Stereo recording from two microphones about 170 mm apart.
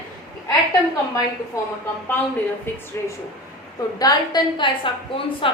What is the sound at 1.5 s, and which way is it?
A woman's voice, 15° left (ahead or behind).